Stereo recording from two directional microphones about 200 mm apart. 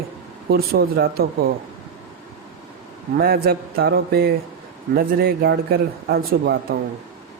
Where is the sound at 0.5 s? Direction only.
50° right (ahead or behind).